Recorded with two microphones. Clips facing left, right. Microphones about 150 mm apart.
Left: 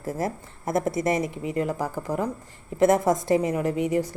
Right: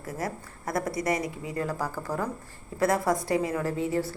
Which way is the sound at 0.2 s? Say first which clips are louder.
Left 4 dB; 25° left (ahead or behind).